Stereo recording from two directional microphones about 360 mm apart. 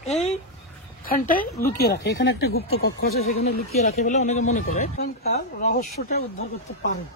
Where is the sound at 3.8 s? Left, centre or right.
Centre.